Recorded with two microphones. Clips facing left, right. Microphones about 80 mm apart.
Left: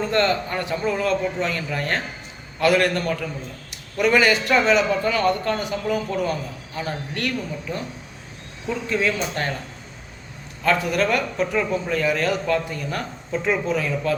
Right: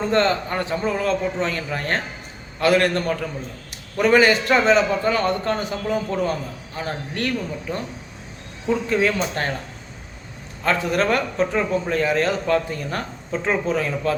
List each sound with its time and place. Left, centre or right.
0.1 s a man's voice: right
8.9 s a man's voice: right
10.6 s a man's voice: right